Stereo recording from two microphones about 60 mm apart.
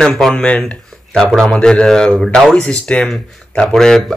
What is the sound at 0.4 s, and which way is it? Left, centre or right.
Speech, centre.